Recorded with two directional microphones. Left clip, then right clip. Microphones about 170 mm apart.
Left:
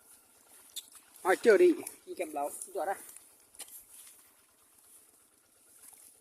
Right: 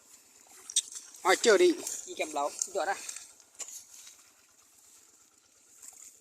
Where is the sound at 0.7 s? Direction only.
25° left (ahead or behind).